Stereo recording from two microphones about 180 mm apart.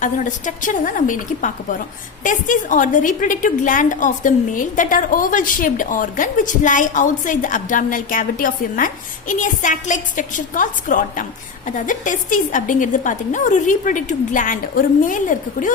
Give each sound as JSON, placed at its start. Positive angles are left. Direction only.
{"t": 0.0, "sound": "a woman's voice", "side_deg": 45}